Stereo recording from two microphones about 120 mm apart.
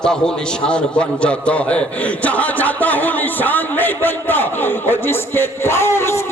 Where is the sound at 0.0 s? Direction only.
5° left (ahead or behind).